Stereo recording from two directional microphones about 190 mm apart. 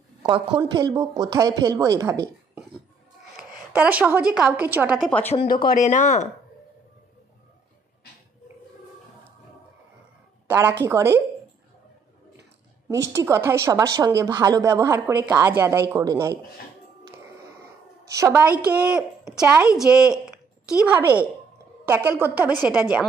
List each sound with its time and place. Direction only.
0.2 s speech: 25° right (ahead or behind)
3.3 s a woman's voice: 5° right (ahead or behind)
5.7 s speech: 40° left (ahead or behind)
10.4 s a woman's voice: 10° right (ahead or behind)
13.1 s speech: 15° right (ahead or behind)
18.0 s a woman's voice: 15° right (ahead or behind)